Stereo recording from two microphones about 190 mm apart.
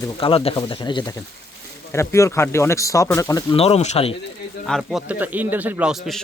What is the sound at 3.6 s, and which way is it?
Speech, 35° left (ahead or behind).